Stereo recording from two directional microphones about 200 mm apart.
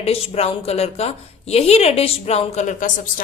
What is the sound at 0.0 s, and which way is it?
A woman's voice, 30° left (ahead or behind).